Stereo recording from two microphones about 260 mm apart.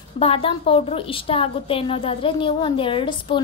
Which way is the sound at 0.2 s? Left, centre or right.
Left.